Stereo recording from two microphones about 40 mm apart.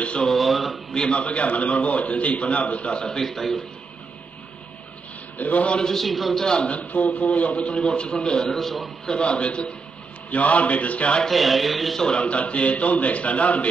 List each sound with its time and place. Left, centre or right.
0.4 s speech: centre
1.1 s a man's voice: left
3.2 s a man's voice: centre
5.4 s a man's voice: left
5.8 s a man's voice: centre
6.0 s speech: centre
6.4 s a man's voice: left
6.7 s a man's voice: left; by 8.5 s centre
8.5 s speech: centre
9.0 s a man's voice: left
11.2 s speech: centre
12.2 s a man's voice: left